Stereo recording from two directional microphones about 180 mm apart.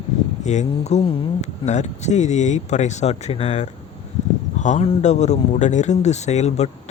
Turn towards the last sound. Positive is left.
turn(degrees=40)  # may be behind; listen again after turning